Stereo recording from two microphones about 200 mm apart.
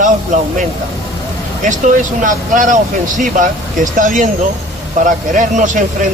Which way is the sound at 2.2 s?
40° right (ahead or behind).